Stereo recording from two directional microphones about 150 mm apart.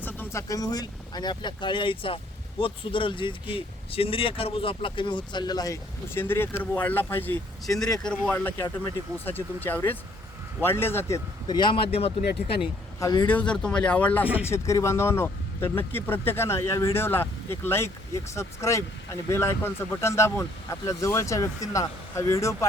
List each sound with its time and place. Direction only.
0.0 s speech: 15° left (ahead or behind)
11.4 s speech: 30° left (ahead or behind)
13.0 s speech: 25° left (ahead or behind)
13.2 s speech: 10° left (ahead or behind)